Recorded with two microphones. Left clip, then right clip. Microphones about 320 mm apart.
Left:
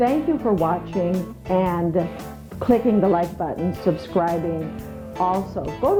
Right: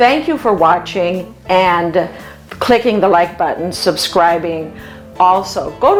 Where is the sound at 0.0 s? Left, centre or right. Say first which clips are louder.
Right 9 dB; centre.